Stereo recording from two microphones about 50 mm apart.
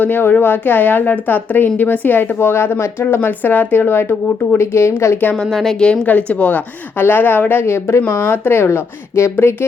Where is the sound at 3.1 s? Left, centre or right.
Left.